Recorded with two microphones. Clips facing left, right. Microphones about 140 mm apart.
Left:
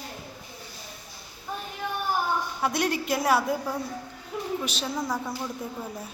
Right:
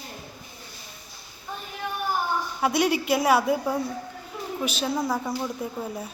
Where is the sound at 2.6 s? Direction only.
5° right (ahead or behind).